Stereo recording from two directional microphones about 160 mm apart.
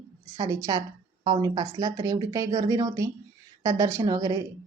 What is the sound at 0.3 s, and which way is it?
A woman's voice, 20° right (ahead or behind).